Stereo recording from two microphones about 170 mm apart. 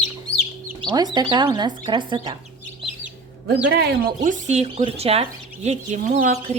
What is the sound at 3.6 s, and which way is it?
Speech, 75° right (ahead or behind).